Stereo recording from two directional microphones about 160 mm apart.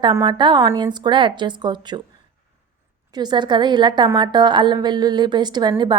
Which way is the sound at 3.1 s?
25° right (ahead or behind).